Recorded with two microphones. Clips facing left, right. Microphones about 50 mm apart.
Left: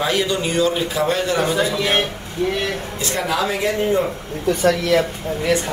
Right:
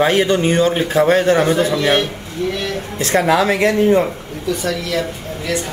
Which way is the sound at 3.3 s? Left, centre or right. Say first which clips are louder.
Right 5 dB; right.